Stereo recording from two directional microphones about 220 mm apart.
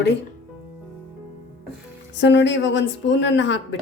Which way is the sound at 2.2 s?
55° left (ahead or behind).